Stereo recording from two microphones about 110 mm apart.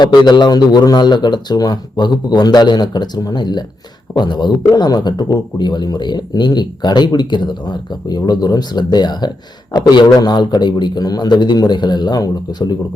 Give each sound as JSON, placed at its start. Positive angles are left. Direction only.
{"t": 0.0, "sound": "speech", "side_deg": 45}